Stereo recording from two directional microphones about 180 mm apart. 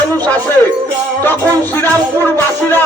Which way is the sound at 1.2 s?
10° left (ahead or behind).